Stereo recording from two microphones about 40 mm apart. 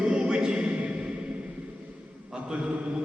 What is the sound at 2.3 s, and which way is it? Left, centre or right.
Speech, right.